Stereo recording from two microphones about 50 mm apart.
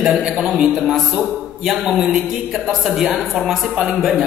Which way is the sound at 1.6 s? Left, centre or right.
Centre.